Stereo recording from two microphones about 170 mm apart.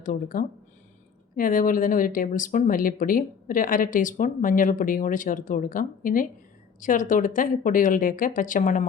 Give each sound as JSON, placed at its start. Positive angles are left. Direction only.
{"t": 0.0, "sound": "speech", "side_deg": 55}